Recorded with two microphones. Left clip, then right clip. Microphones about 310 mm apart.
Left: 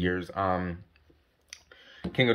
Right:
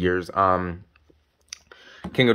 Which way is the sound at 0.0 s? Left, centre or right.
Centre.